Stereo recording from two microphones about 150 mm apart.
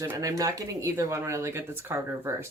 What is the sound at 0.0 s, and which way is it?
Speech, 20° right (ahead or behind).